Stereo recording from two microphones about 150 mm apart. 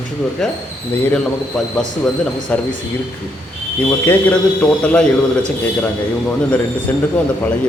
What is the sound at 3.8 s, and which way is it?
Speech, 10° left (ahead or behind).